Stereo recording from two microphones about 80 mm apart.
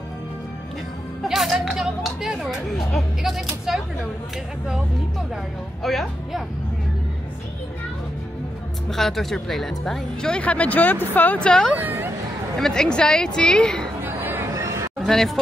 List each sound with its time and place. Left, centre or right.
1.2 s speech: centre
5.8 s speech: centre
8.9 s speech: centre
11.7 s speech: right
12.5 s speech: centre
14.0 s chatter: right
14.5 s chatter: right
15.0 s speech: centre